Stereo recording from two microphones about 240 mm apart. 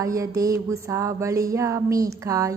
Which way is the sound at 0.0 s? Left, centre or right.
Centre.